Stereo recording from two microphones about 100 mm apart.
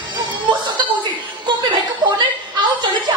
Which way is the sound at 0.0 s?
55° right (ahead or behind).